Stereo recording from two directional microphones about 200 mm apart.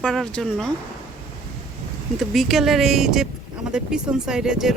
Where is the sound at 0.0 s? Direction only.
5° left (ahead or behind).